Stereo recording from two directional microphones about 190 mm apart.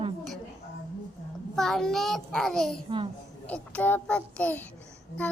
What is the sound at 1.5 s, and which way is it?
A child's voice, centre (ahead or behind).